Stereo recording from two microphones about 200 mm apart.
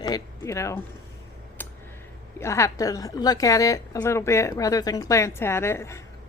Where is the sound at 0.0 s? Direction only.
15° left (ahead or behind).